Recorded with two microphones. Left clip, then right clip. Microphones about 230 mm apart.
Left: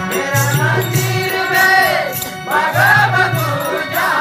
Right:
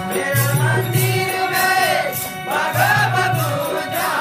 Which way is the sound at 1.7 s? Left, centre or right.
Right.